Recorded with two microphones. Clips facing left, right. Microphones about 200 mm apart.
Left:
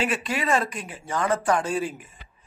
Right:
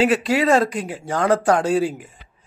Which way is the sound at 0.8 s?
75° right (ahead or behind).